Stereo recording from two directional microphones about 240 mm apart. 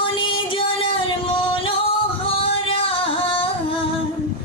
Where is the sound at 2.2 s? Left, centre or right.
Left.